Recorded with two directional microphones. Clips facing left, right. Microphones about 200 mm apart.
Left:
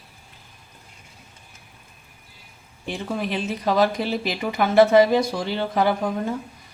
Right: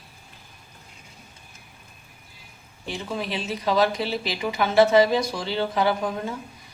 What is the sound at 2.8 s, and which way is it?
Speech, 50° left (ahead or behind).